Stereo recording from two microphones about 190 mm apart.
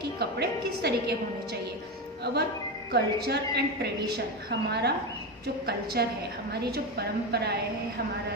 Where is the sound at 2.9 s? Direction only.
60° right (ahead or behind).